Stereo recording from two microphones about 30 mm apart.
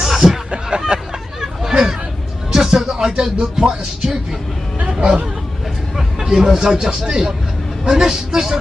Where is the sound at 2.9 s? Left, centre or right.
Right.